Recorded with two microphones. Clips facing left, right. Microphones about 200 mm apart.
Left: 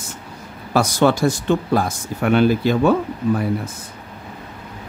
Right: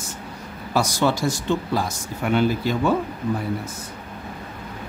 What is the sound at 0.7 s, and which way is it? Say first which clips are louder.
Speech: left 5 dB; 55° left (ahead or behind).